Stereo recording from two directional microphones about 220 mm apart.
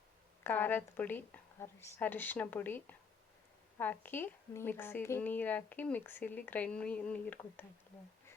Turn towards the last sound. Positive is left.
turn(degrees=5)  # may be behind; listen again after turning